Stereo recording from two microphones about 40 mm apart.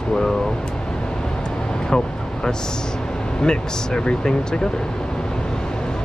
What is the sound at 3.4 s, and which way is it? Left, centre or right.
Speech, left.